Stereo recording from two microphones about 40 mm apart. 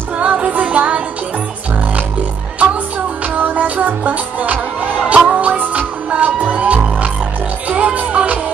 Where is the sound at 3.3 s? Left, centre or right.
Right.